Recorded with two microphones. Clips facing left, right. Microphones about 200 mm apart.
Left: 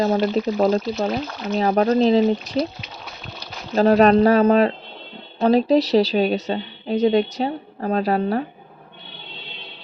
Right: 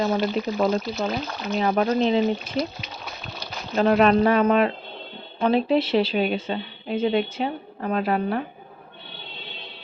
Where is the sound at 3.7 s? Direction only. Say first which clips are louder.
Left 4 dB; 40° left (ahead or behind).